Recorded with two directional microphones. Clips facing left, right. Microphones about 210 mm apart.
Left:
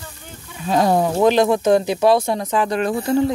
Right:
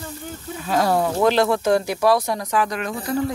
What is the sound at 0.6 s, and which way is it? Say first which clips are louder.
Speech: left 3 dB; 20° left (ahead or behind).